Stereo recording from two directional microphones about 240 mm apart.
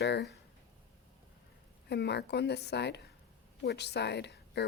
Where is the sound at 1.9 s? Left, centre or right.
Left.